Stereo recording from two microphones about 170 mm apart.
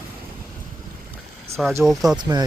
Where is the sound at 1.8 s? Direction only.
Centre (ahead or behind).